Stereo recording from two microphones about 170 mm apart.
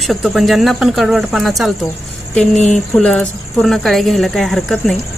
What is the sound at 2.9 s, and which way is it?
A woman's voice, 5° left (ahead or behind).